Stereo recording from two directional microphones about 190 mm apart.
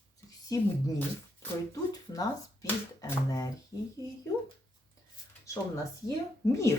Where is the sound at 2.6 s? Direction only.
15° left (ahead or behind).